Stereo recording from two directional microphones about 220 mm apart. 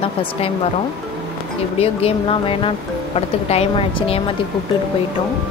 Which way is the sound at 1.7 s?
25° left (ahead or behind).